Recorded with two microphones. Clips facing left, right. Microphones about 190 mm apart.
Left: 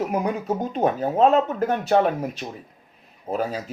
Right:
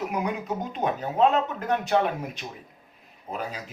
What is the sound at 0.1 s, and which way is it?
Speech, 45° left (ahead or behind).